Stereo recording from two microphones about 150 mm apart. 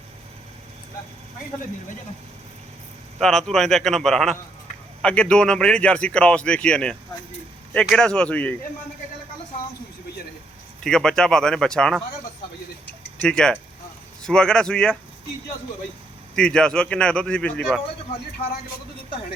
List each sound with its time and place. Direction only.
3.2 s speech: 5° left (ahead or behind)
10.8 s speech: 5° left (ahead or behind)
13.2 s speech: 5° left (ahead or behind)
16.3 s speech: 5° left (ahead or behind)